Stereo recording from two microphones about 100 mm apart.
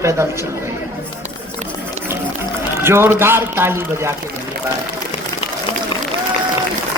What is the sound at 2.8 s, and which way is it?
A man's voice, 25° right (ahead or behind).